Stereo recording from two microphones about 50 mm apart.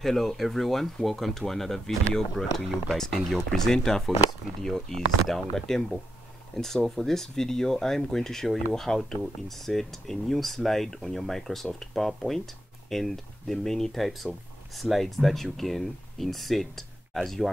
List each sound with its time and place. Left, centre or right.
0.0 s speech: centre